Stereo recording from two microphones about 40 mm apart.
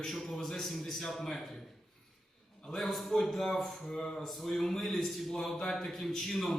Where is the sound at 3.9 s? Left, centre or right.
Centre.